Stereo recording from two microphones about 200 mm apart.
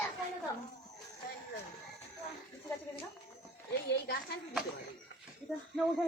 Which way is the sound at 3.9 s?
55° left (ahead or behind).